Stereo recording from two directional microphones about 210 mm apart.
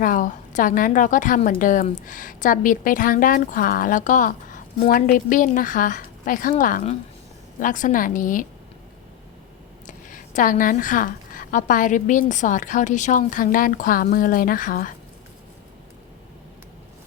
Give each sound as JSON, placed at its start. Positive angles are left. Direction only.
{"t": 0.0, "sound": "a woman's voice", "side_deg": 40}
{"t": 9.8, "sound": "a woman's voice", "side_deg": 40}